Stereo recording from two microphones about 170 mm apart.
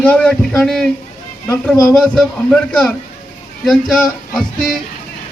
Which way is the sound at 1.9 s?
5° left (ahead or behind).